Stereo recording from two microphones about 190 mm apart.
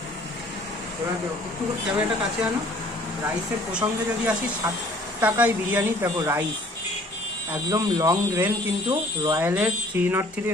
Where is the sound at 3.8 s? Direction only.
25° right (ahead or behind).